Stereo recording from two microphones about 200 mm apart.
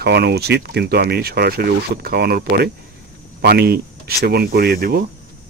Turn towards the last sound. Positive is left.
turn(degrees=-50)  # may be behind; listen again after turning